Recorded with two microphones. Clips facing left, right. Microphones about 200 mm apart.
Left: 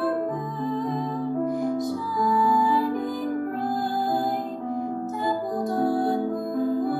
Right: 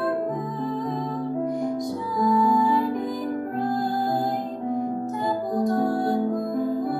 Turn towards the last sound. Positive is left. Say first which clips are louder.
# even
turn(degrees=0)  # may be behind; listen again after turning